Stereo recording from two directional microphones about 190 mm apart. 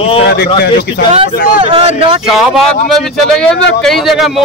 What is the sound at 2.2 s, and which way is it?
Speech, centre (ahead or behind).